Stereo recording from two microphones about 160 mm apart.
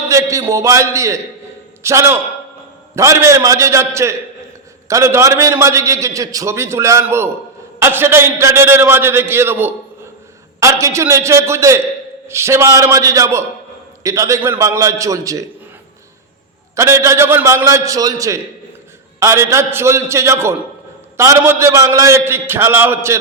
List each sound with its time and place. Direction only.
0.1 s a man's voice: 20° right (ahead or behind)
16.7 s a man's voice: 20° right (ahead or behind)